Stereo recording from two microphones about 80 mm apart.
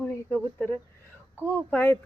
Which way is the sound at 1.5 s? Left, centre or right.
Left.